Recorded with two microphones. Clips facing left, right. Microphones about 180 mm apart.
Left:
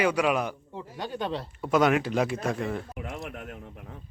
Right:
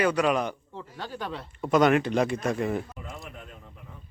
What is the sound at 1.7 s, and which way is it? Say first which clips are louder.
Speech: right 2 dB; 5° left (ahead or behind).